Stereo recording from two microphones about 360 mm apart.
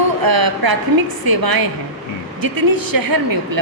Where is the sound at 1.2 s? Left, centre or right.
Right.